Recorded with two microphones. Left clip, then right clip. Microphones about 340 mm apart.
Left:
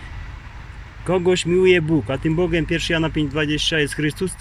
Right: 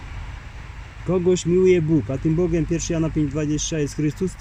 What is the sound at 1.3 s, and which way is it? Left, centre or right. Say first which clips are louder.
Speech: left 1 dB; left.